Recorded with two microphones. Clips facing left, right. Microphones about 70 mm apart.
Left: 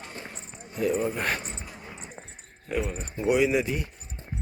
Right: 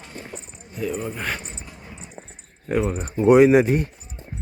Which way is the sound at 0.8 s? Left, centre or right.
Centre.